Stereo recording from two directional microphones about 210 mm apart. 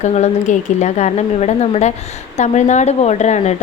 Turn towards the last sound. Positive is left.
turn(degrees=35)  # may be behind; listen again after turning